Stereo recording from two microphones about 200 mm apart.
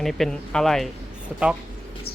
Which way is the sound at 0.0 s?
Centre (ahead or behind).